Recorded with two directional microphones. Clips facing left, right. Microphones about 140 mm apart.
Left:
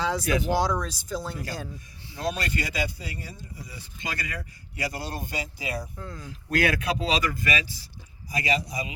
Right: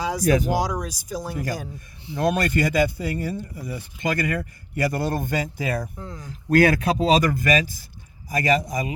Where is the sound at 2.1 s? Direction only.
55° right (ahead or behind).